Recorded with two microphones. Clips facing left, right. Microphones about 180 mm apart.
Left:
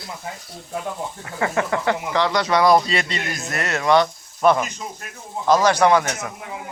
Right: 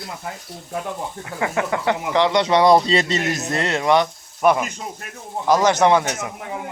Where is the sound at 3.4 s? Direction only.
25° right (ahead or behind).